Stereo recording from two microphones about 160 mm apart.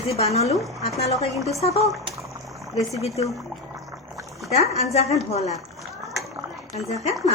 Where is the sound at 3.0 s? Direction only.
40° left (ahead or behind).